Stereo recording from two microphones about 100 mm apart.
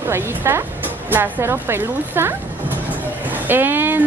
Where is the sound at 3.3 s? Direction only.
20° right (ahead or behind).